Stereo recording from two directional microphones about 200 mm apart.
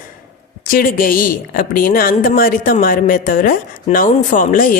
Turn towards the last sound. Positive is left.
turn(degrees=45)  # may be behind; listen again after turning